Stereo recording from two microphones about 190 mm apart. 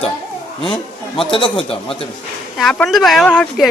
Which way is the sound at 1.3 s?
25° left (ahead or behind).